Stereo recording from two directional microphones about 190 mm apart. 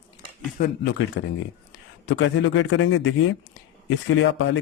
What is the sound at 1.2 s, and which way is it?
A man's voice, 80° left.